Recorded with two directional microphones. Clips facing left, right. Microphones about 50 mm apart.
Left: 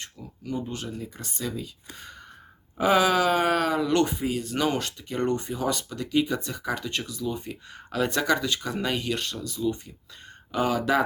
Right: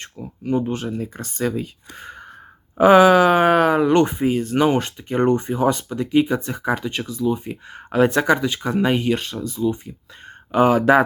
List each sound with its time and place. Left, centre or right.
0.0 s speech: right
10.5 s speech: right